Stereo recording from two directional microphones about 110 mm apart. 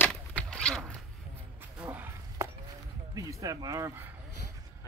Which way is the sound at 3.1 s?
35° right (ahead or behind).